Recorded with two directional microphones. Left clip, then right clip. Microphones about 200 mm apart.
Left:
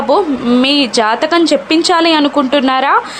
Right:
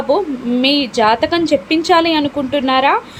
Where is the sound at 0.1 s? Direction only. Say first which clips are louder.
Left 5 dB; 5° left (ahead or behind).